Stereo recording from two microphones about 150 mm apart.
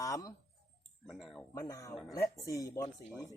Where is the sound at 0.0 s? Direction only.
25° left (ahead or behind).